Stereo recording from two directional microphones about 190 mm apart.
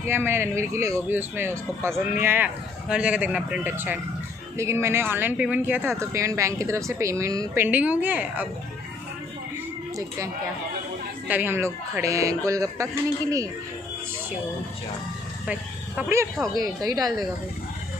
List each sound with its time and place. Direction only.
0.0 s a man's voice: 10° right (ahead or behind)
9.9 s a man's voice: 15° right (ahead or behind)
16.0 s a man's voice: 15° right (ahead or behind)